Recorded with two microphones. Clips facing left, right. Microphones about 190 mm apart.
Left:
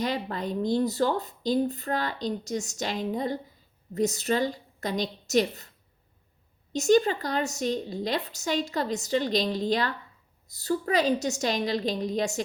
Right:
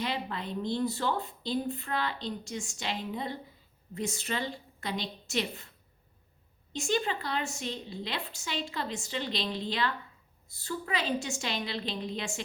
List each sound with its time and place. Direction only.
0.0 s speech: 40° left (ahead or behind)
6.7 s speech: 40° left (ahead or behind)